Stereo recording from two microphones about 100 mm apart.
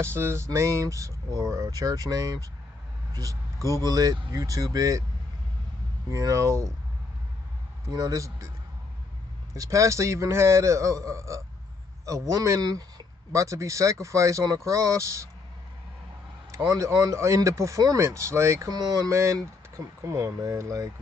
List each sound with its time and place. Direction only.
0.0 s speech: 25° right (ahead or behind)
6.0 s speech: 35° right (ahead or behind)
7.9 s speech: 40° right (ahead or behind)
9.5 s speech: 35° right (ahead or behind)
16.5 s speech: 35° right (ahead or behind)
18.7 s speech: 40° right (ahead or behind)